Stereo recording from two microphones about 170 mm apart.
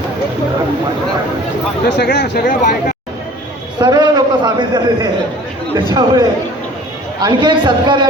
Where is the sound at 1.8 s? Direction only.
80° left.